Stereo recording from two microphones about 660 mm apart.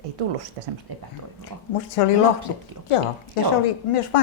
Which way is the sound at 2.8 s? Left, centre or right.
Right.